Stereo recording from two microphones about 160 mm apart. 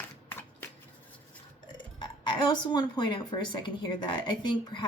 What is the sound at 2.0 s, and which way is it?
Speech, 30° left (ahead or behind).